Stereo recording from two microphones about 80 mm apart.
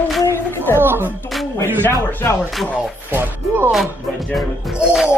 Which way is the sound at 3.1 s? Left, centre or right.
Right.